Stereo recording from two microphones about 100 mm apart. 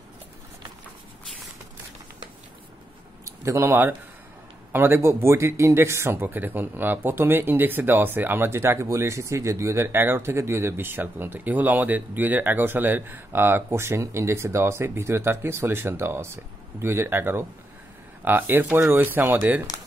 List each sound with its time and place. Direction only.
3.3 s speech: 30° right (ahead or behind)